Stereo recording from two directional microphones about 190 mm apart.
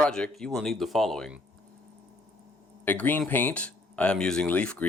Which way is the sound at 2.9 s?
10° left (ahead or behind).